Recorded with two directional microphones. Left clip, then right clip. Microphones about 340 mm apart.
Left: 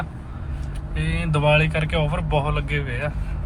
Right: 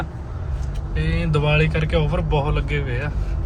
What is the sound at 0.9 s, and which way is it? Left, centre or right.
Speech, centre.